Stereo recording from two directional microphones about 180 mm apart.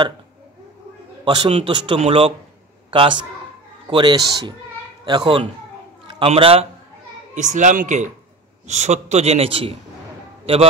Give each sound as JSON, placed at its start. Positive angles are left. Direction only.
{"t": 1.2, "sound": "a man's voice", "side_deg": -25}